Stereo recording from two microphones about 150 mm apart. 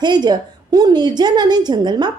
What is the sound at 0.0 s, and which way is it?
A woman's voice, 30° right (ahead or behind).